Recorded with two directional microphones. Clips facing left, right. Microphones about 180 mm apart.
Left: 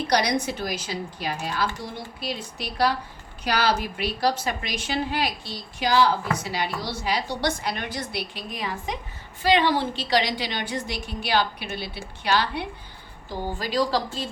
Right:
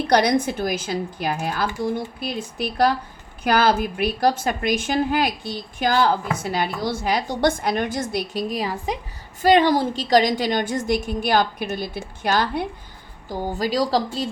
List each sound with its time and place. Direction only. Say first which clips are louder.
0.1 s a woman's voice: right 6 dB; 55° right (ahead or behind); by 14.0 s 35° right (ahead or behind)